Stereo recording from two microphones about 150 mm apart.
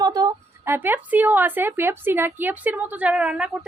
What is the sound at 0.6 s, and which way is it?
A woman's voice, 15° right (ahead or behind).